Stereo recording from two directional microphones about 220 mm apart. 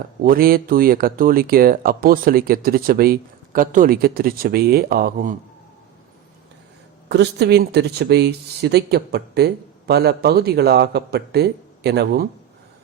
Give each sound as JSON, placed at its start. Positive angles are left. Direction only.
{"t": 0.2, "sound": "speech", "side_deg": -40}
{"t": 7.1, "sound": "speech", "side_deg": -50}